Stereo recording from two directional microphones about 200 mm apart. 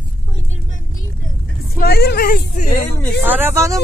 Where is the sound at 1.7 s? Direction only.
50° left (ahead or behind).